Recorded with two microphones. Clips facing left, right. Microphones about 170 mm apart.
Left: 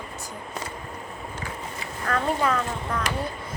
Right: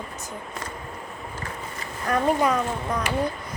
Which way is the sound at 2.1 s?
15° right (ahead or behind).